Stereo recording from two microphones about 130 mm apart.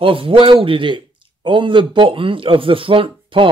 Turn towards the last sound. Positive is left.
turn(degrees=-45)  # may be behind; listen again after turning